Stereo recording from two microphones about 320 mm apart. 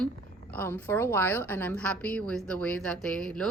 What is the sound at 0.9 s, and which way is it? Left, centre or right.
A woman's voice, centre.